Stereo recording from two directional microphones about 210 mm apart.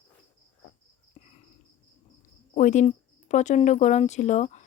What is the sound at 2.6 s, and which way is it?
Speech, 35° left (ahead or behind).